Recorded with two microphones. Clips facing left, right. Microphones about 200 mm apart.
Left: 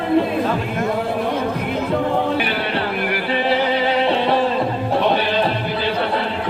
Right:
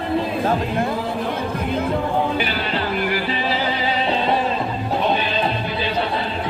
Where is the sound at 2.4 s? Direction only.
60° left (ahead or behind).